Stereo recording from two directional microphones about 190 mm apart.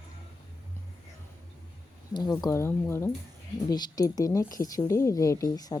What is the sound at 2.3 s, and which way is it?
Speech, 15° left (ahead or behind).